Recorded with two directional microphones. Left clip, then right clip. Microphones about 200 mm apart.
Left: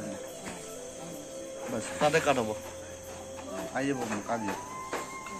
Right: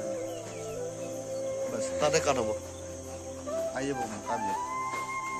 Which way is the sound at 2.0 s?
55° right (ahead or behind).